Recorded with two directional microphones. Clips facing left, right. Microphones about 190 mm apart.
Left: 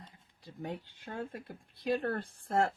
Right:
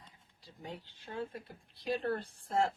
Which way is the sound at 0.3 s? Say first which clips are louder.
Left 6 dB; 55° left (ahead or behind).